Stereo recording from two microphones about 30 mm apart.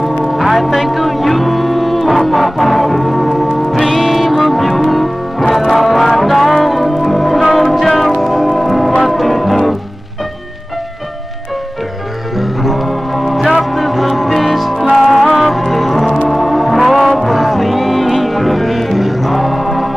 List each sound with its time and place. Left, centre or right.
0.2 s music: centre
12.4 s music: centre